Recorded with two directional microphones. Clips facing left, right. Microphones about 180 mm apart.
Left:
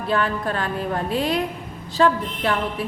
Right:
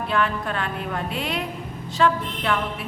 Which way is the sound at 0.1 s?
35° left (ahead or behind).